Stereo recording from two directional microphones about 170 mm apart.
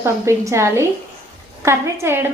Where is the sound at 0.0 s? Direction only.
15° right (ahead or behind).